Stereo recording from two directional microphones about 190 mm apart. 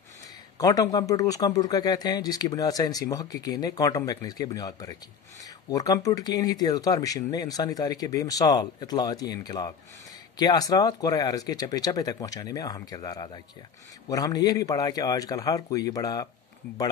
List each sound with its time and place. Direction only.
0.6 s speech: 20° left (ahead or behind)